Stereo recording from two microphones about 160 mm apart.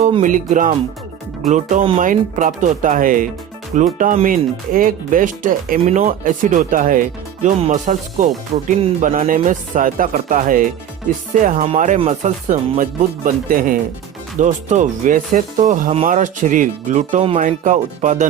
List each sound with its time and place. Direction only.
0.0 s speech: 45° right (ahead or behind)
11.9 s speech: 40° right (ahead or behind)
12.5 s speech: 55° right (ahead or behind)
14.3 s speech: 50° right (ahead or behind)